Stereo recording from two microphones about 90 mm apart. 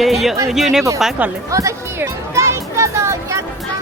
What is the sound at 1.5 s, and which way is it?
Speech, 35° right (ahead or behind).